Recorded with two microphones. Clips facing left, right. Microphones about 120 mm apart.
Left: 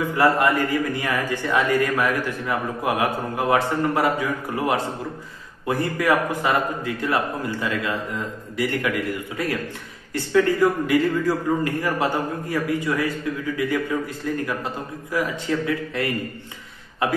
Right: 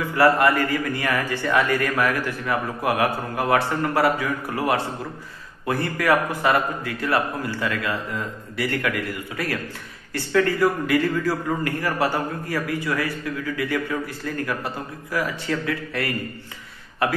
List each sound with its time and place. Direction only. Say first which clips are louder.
0.1 s a man's voice: right 2 dB; 20° left (ahead or behind)
10.9 s a man's voice: left 1 dB; 20° left (ahead or behind)